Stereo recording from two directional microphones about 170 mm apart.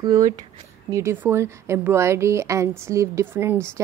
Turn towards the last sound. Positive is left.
turn(degrees=-15)  # may be behind; listen again after turning